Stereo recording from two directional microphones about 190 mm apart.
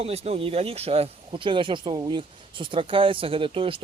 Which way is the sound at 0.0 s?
35° right (ahead or behind).